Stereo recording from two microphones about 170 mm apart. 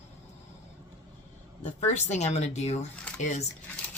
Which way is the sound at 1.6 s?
45° left (ahead or behind).